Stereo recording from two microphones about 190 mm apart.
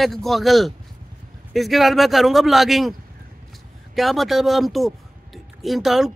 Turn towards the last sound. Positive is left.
turn(degrees=0)  # may be behind; listen again after turning